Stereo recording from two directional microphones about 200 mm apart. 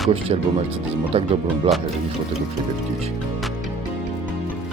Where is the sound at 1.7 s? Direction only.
30° right (ahead or behind).